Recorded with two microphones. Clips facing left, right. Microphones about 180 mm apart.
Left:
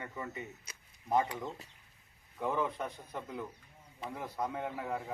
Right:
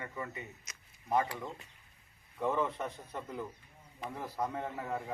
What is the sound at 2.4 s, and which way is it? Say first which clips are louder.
A man's voice: right 1 dB; 5° left (ahead or behind).